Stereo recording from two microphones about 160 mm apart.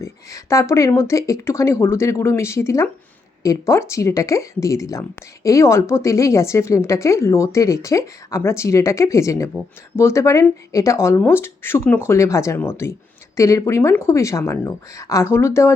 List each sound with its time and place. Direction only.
0.0 s speech: 20° left (ahead or behind)